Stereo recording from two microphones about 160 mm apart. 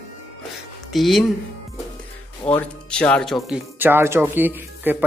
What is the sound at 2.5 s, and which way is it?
Speech, 10° left (ahead or behind).